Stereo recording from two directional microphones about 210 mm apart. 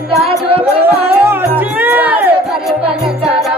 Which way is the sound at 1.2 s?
10° right (ahead or behind).